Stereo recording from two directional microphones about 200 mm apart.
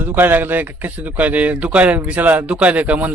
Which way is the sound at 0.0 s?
10° right (ahead or behind).